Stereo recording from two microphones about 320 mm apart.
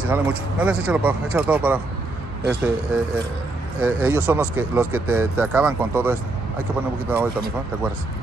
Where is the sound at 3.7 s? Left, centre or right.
Centre.